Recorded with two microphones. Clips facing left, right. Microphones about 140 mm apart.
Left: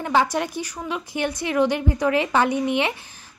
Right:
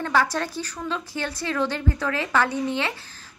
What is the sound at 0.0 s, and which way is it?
A woman's voice, 15° left (ahead or behind).